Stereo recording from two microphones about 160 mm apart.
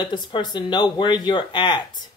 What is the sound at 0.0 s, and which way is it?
Speech, 30° left (ahead or behind).